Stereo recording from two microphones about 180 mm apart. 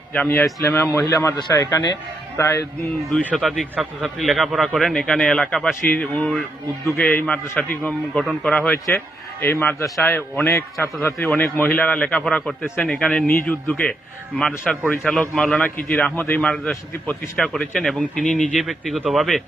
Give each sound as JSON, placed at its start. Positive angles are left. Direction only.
{"t": 0.1, "sound": "a man's voice", "side_deg": 10}
{"t": 3.3, "sound": "a man's voice", "side_deg": 0}